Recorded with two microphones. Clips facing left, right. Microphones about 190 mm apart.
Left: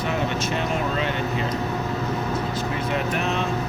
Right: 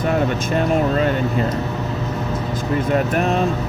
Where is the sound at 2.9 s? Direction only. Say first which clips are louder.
Right 7 dB; 50° right (ahead or behind).